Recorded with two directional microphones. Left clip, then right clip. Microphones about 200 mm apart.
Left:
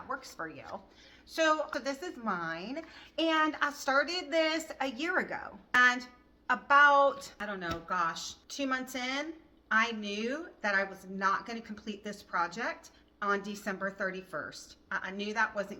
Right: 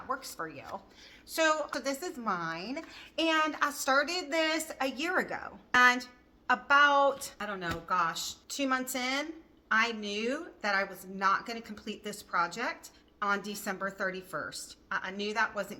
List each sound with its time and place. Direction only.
0.1 s speech: 20° right (ahead or behind)